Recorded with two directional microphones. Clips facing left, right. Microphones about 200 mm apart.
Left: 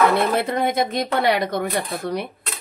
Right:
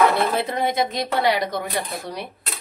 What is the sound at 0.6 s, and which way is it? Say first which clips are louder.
Speech: left 2 dB; 55° left (ahead or behind).